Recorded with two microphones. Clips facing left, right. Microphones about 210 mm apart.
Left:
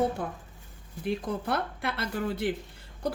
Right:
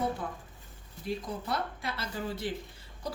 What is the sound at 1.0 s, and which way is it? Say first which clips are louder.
A woman's voice: left 5 dB; 65° left (ahead or behind).